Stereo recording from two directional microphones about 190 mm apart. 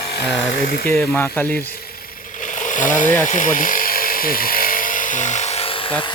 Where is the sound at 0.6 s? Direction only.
55° left (ahead or behind).